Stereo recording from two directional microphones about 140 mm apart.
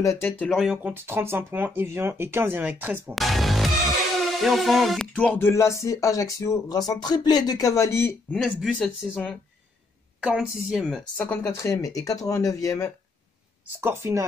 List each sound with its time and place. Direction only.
0.0 s speech: 20° left (ahead or behind)
0.4 s speech: centre (ahead or behind)
0.9 s speech: 15° right (ahead or behind)
3.2 s music: centre (ahead or behind)
5.1 s speech: 10° left (ahead or behind)
8.4 s speech: centre (ahead or behind)
11.1 s speech: 15° left (ahead or behind)
13.7 s speech: 15° right (ahead or behind)